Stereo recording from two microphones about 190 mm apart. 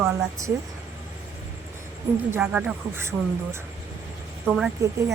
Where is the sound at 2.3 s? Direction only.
5° right (ahead or behind).